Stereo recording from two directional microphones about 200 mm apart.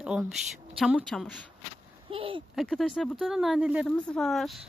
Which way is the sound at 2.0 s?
25° right (ahead or behind).